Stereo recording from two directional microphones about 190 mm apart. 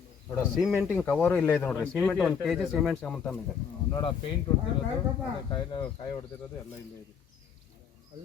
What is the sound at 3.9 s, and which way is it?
Speech, 25° left (ahead or behind).